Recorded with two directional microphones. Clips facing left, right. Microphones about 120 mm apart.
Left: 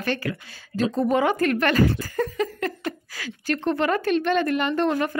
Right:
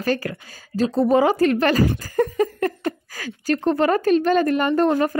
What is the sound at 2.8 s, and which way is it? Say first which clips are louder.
A woman's voice: right 4 dB; 40° right (ahead or behind).